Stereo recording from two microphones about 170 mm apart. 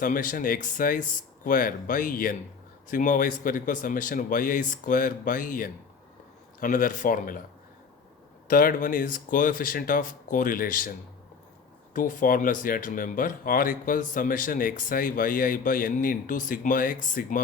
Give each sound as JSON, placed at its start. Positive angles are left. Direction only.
{"t": 0.0, "sound": "speech", "side_deg": 55}
{"t": 8.4, "sound": "speech", "side_deg": 55}
{"t": 11.9, "sound": "speech", "side_deg": 50}